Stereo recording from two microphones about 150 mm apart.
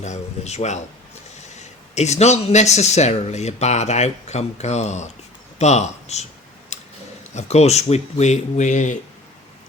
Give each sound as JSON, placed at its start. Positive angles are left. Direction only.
{"t": 0.0, "sound": "speech", "side_deg": 50}
{"t": 6.7, "sound": "clicking", "side_deg": 50}
{"t": 7.3, "sound": "speech", "side_deg": 45}